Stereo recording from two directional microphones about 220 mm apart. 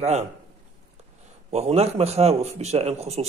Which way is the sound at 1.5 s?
30° right (ahead or behind).